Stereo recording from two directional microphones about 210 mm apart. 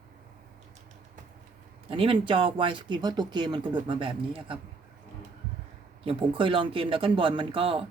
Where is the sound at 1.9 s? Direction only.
25° right (ahead or behind).